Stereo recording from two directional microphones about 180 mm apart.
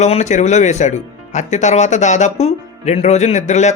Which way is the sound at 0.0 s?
40° left (ahead or behind).